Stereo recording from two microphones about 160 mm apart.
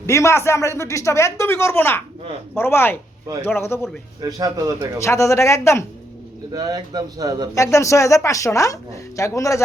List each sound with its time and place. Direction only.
0.0 s speech: 20° left (ahead or behind)
4.2 s speech: 25° right (ahead or behind)
4.9 s speech: 20° left (ahead or behind)
6.5 s speech: 25° right (ahead or behind)
7.5 s speech: 20° left (ahead or behind)